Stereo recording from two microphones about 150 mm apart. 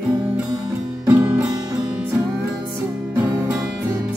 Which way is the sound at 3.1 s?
15° right (ahead or behind).